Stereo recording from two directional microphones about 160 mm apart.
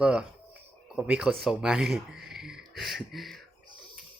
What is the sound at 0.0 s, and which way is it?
Speech, 5° right (ahead or behind).